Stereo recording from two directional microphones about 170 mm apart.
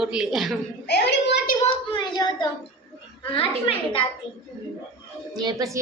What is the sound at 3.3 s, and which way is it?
Speech, 35° left (ahead or behind).